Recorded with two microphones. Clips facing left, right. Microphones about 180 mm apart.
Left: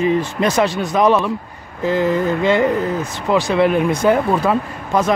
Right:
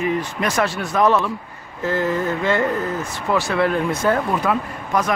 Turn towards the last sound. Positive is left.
turn(degrees=25)  # may be behind; listen again after turning